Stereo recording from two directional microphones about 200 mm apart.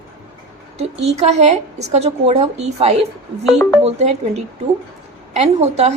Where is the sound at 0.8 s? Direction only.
30° right (ahead or behind).